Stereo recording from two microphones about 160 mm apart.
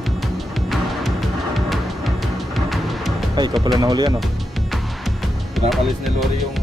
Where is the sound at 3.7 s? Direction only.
25° right (ahead or behind).